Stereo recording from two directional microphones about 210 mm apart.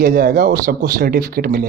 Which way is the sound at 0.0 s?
40° right (ahead or behind).